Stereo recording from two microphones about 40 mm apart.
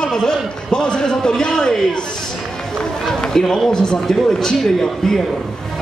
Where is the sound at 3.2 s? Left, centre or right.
Centre.